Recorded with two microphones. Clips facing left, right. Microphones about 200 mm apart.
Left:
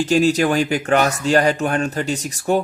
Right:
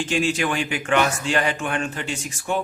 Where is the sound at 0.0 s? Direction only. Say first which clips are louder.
Left 7 dB; 40° left (ahead or behind).